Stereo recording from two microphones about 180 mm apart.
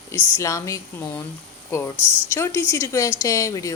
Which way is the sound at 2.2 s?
15° left (ahead or behind).